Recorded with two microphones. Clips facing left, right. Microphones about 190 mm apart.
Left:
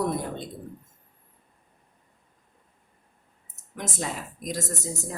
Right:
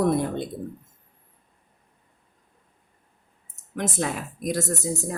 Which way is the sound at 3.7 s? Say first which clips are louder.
Right 5 dB; 65° right (ahead or behind).